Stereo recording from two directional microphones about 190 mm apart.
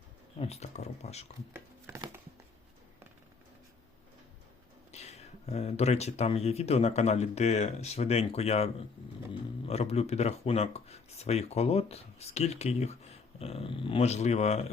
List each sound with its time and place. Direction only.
0.3 s speech: 35° left (ahead or behind)
1.5 s a sound: 15° right (ahead or behind)
4.9 s speech: 35° left (ahead or behind)